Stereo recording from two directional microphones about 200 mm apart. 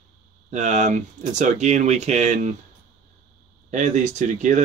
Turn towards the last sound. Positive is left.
turn(degrees=-40)  # may be behind; listen again after turning